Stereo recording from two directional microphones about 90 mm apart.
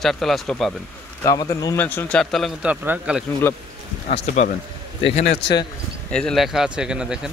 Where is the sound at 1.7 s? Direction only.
20° left (ahead or behind).